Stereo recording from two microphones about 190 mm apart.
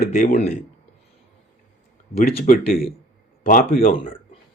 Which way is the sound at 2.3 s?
45° left (ahead or behind).